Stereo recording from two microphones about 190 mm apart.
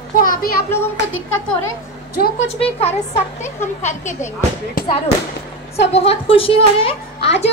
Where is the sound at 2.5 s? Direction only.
30° left (ahead or behind).